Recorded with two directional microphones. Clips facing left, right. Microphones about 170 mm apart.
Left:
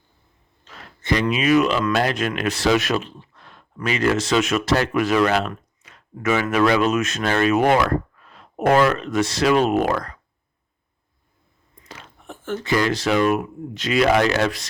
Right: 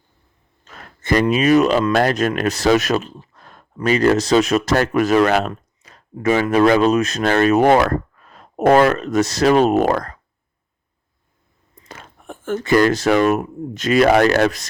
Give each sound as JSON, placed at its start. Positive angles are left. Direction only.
{"t": 0.6, "sound": "a sound", "side_deg": -45}
{"t": 1.9, "sound": "speech", "side_deg": -45}
{"t": 11.9, "sound": "speech", "side_deg": -50}